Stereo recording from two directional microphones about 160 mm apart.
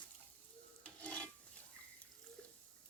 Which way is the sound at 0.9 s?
5° left (ahead or behind).